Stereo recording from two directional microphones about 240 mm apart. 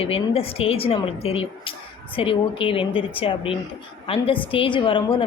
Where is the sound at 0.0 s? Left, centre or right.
Left.